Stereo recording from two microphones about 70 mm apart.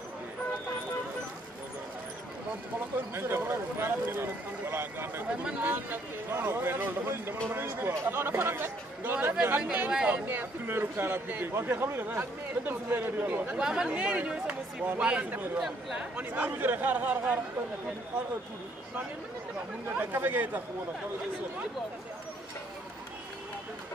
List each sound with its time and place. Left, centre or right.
3.2 s a man's voice: right; by 10.2 s centre
10.2 s a man's voice: right
13.6 s a man's voice: centre
15.6 s speech: centre
16.2 s a man's voice: right
19.9 s a man's voice: right